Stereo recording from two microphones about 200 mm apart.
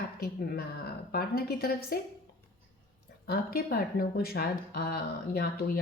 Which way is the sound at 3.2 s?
50° left (ahead or behind).